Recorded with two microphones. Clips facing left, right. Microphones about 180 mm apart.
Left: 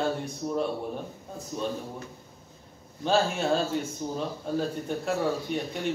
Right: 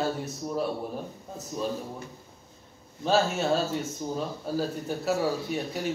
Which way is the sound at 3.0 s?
Centre (ahead or behind).